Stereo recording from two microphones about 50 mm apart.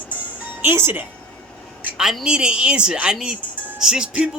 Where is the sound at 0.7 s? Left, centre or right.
Right.